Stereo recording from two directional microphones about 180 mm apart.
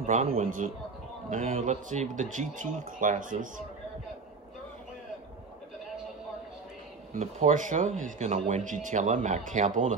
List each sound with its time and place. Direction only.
0.0 s speech: 45° right (ahead or behind)
7.2 s speech: 40° right (ahead or behind)